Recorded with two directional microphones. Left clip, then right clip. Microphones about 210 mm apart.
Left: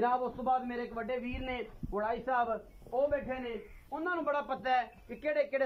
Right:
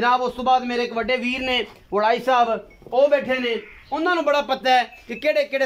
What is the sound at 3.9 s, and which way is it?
A man's voice, 20° right (ahead or behind).